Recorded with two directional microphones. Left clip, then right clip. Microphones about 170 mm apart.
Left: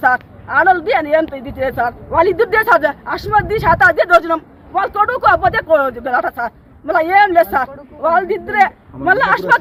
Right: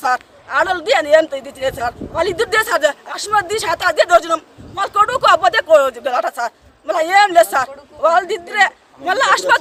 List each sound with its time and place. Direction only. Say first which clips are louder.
0.0 s speech: left 4 dB; 25° right (ahead or behind)